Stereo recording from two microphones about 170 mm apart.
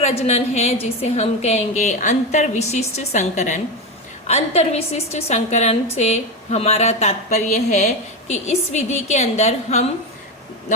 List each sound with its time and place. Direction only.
0.0 s a woman's voice: 35° left (ahead or behind)